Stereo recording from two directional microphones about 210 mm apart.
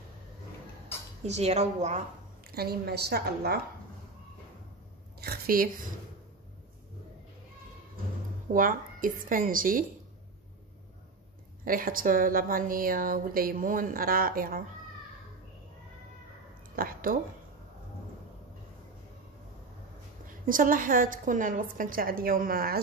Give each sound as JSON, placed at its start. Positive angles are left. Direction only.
{"t": 1.2, "sound": "a woman's voice", "side_deg": -30}
{"t": 2.5, "sound": "a woman's voice", "side_deg": -50}
{"t": 5.2, "sound": "a woman's voice", "side_deg": -45}
{"t": 8.5, "sound": "a woman's voice", "side_deg": -40}
{"t": 11.6, "sound": "a woman's voice", "side_deg": -40}
{"t": 16.7, "sound": "speech", "side_deg": -45}
{"t": 20.4, "sound": "a woman's voice", "side_deg": -40}